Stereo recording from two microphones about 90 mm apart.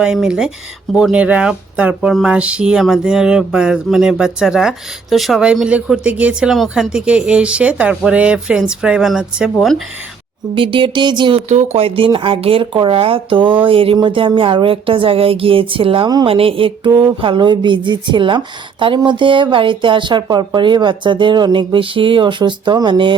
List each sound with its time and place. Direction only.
0.0 s speech: 10° right (ahead or behind)
5.6 s speech: 10° right (ahead or behind)
6.5 s speech: 5° right (ahead or behind)
10.5 s speech: 70° right (ahead or behind)
13.7 s speech: 90° right; by 20.2 s 60° right (ahead or behind)
20.2 s speech: 50° right (ahead or behind)